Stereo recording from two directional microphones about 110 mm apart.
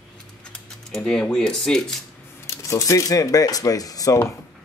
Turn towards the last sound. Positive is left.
turn(degrees=35)  # may be behind; listen again after turning